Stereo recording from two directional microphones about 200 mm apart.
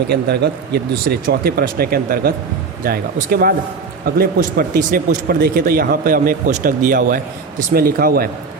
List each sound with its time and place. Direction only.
0.1 s speech: 55° right (ahead or behind)